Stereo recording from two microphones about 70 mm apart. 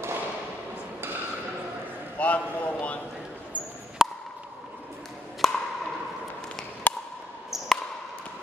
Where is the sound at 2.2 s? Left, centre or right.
Centre.